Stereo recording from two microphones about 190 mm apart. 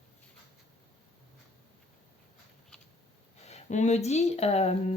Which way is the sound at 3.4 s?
35° left (ahead or behind).